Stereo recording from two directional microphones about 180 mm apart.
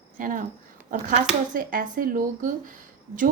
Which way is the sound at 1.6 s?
50° right (ahead or behind).